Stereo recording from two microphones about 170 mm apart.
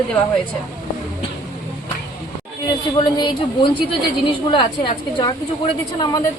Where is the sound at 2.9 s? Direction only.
25° left (ahead or behind).